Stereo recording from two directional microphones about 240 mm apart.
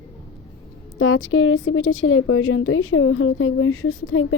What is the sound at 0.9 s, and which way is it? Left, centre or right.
A woman's voice, left.